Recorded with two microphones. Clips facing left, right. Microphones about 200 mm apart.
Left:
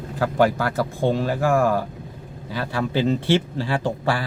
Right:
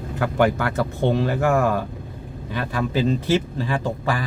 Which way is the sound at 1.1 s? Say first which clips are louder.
Right 1 dB; 20° right (ahead or behind).